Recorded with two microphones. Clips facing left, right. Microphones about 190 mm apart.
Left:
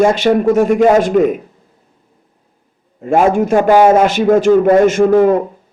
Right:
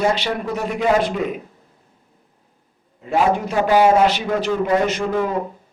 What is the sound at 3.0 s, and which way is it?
A man's voice, 50° left (ahead or behind).